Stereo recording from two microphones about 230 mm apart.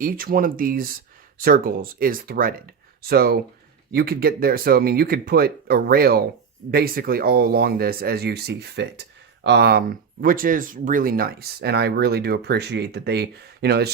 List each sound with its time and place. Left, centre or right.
0.0 s speech: right